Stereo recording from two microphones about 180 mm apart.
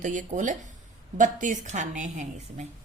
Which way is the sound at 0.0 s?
45° right (ahead or behind).